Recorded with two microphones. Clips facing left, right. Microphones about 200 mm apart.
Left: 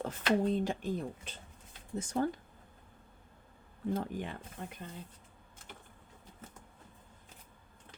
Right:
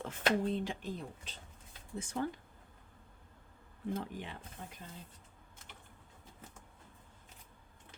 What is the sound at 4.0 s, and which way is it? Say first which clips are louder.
Speech: left 5 dB; 50° left (ahead or behind).